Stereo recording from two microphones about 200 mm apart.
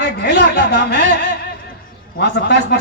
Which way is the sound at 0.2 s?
55° left (ahead or behind).